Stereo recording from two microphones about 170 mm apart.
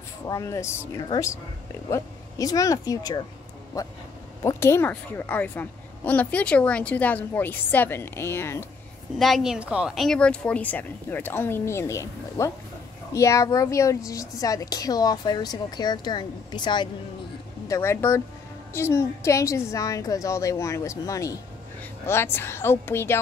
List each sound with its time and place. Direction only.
0.3 s a woman's voice: 20° left (ahead or behind)
9.2 s a woman's voice: centre (ahead or behind); by 16.9 s 25° left (ahead or behind)
17.6 s a woman's voice: 15° left (ahead or behind)